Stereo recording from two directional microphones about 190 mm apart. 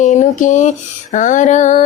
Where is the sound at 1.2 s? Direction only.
40° left (ahead or behind).